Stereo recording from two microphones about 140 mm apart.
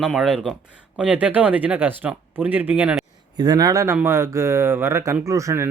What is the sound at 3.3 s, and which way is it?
Speech, 30° right (ahead or behind).